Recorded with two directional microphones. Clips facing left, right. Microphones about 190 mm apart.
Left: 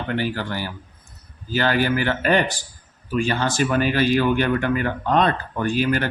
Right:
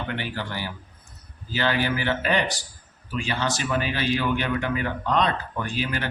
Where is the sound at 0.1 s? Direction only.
45° left (ahead or behind).